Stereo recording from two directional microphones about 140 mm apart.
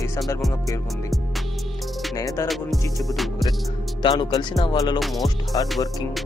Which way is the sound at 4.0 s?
30° left (ahead or behind).